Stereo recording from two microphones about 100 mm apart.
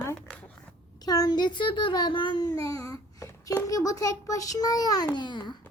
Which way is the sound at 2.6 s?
35° left (ahead or behind).